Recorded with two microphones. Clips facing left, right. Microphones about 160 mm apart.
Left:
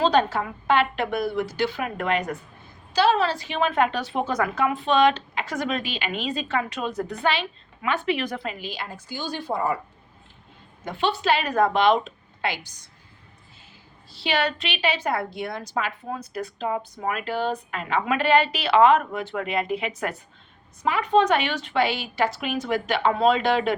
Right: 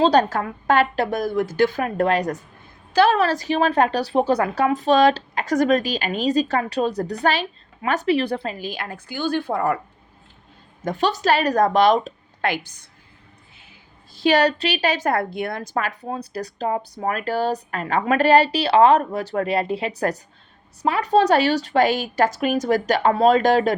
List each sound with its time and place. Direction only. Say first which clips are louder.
0.0 s a woman's voice: right 4 dB; 40° right (ahead or behind)
2.9 s a woman's voice: right 4 dB; 55° right (ahead or behind)
10.8 s a woman's voice: right 3 dB; 40° right (ahead or behind)
14.1 s a woman's voice: right 7 dB; 45° right (ahead or behind)